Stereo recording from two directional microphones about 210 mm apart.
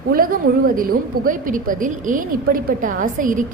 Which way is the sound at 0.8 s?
40° right (ahead or behind).